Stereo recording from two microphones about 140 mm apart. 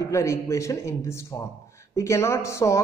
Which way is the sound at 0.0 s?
20° left (ahead or behind).